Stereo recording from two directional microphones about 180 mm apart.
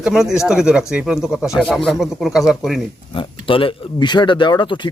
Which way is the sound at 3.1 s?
30° left (ahead or behind).